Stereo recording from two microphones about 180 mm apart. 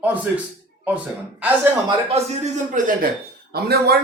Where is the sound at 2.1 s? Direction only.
40° right (ahead or behind).